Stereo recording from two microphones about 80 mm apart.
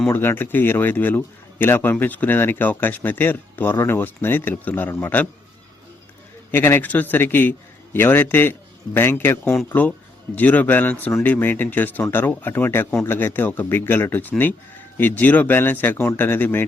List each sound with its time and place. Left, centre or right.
0.1 s a man's voice: left
6.5 s a man's voice: left